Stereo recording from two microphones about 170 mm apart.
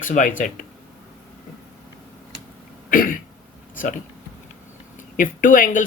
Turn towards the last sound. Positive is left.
turn(degrees=50)  # may be behind; listen again after turning